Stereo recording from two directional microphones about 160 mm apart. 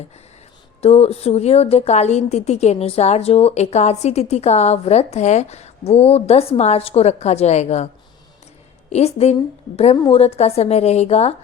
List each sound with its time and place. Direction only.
0.8 s a woman's voice: 40° left (ahead or behind)
8.9 s a woman's voice: 40° left (ahead or behind)